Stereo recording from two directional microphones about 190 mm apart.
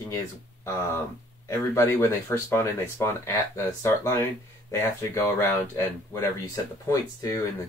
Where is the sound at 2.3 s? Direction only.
15° left (ahead or behind).